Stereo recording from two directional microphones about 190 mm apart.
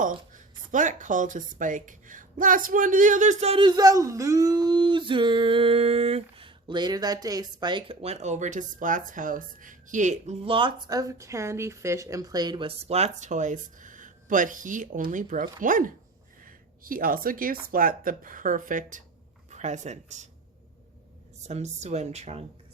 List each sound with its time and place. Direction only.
0.0 s speech: 45° right (ahead or behind)
21.4 s speech: 35° right (ahead or behind)